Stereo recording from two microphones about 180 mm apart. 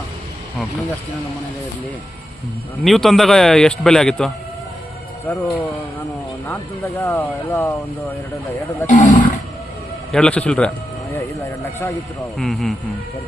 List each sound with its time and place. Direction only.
2.8 s a man's voice: centre (ahead or behind)
5.3 s speech: 10° left (ahead or behind)
7.0 s speech: 10° left (ahead or behind)
8.9 s roaring cats: 45° left (ahead or behind)
10.1 s a man's voice: 5° left (ahead or behind)
12.4 s a man's voice: centre (ahead or behind)